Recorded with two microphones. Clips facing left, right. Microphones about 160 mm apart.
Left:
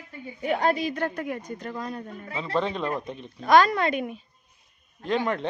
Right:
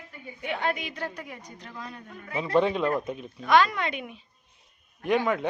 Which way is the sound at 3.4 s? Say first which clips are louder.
Left 3 dB; 40° left (ahead or behind).